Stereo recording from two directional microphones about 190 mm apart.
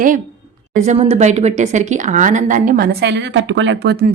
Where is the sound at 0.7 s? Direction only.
35° right (ahead or behind).